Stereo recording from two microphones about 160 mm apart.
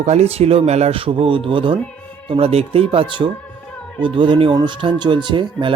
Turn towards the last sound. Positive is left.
turn(degrees=-30)  # may be behind; listen again after turning